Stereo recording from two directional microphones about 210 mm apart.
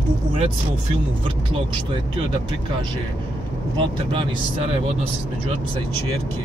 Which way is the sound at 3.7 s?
25° right (ahead or behind).